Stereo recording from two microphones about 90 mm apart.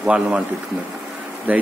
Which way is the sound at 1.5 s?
15° right (ahead or behind).